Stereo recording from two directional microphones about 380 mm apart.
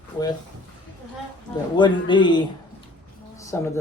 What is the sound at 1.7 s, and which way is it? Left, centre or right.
A man's voice, centre.